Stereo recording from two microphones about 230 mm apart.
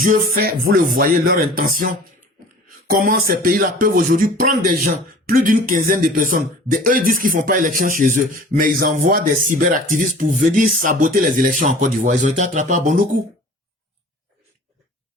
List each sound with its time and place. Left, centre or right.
0.3 s speech: right